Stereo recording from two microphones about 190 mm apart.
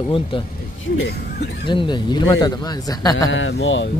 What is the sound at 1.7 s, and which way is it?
A man's voice, 25° left (ahead or behind).